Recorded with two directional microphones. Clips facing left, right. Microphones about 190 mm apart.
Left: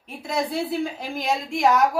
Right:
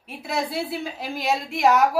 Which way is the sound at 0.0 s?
5° right (ahead or behind).